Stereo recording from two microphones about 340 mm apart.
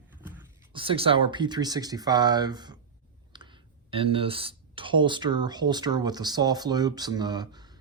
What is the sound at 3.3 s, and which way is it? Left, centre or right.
Clicking, centre.